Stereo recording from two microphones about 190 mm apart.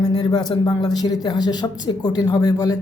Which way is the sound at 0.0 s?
20° left (ahead or behind).